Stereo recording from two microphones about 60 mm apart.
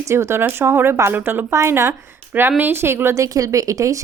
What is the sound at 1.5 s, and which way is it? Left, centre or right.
Speech, right.